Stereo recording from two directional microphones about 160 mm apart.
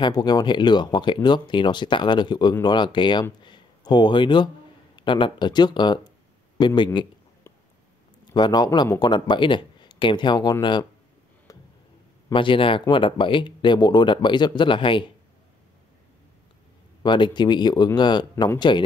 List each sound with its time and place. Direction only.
0.0 s speech: 25° left (ahead or behind)
8.3 s speech: 25° left (ahead or behind)
12.3 s speech: 30° left (ahead or behind)
17.0 s speech: 30° left (ahead or behind)